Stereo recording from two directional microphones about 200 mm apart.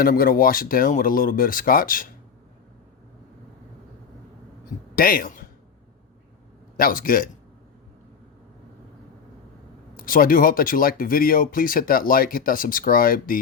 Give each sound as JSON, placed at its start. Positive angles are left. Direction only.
{"t": 0.0, "sound": "speech", "side_deg": 45}
{"t": 4.9, "sound": "speech", "side_deg": 45}
{"t": 6.7, "sound": "speech", "side_deg": 45}
{"t": 10.0, "sound": "speech", "side_deg": 45}